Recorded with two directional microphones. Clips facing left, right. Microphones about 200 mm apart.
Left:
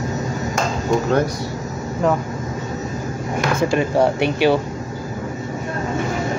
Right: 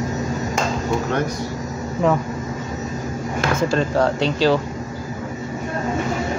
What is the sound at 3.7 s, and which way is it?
Speech, 15° left (ahead or behind).